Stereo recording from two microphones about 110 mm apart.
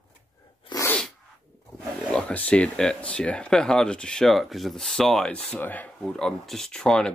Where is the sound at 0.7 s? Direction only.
40° left (ahead or behind).